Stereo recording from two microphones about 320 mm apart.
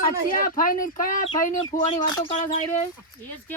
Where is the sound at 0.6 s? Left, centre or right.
Left.